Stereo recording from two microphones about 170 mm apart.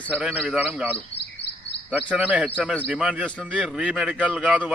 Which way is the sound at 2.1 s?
10° right (ahead or behind).